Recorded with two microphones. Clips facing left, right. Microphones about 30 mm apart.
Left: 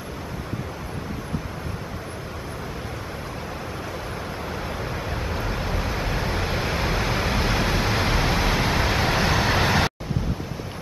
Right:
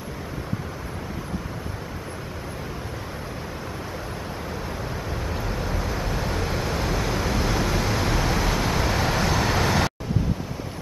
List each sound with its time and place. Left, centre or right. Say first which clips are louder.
5.3 s vehicle: left 1 dB; left